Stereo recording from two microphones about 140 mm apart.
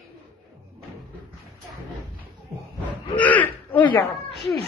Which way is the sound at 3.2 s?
10° left (ahead or behind).